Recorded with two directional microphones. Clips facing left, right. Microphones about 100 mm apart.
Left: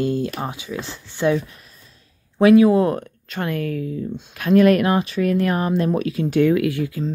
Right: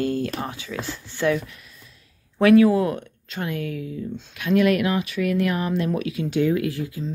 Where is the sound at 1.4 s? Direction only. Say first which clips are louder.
Even; 35° left (ahead or behind).